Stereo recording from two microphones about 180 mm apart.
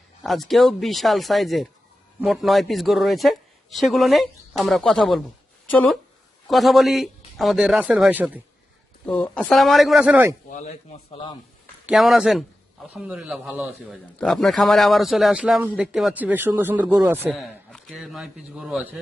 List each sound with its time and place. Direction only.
0.2 s a man's voice: centre (ahead or behind)
9.0 s a man's voice: 5° left (ahead or behind); by 10.3 s 10° right (ahead or behind)
10.5 s a man's voice: 40° left (ahead or behind)
11.9 s a man's voice: centre (ahead or behind)
17.2 s a man's voice: centre (ahead or behind)